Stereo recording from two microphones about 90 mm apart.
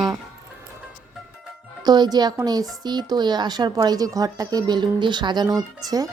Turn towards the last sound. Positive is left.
turn(degrees=-45)  # may be behind; listen again after turning